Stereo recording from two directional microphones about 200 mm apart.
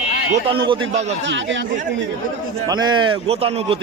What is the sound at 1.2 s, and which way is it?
Speech, 65° right (ahead or behind).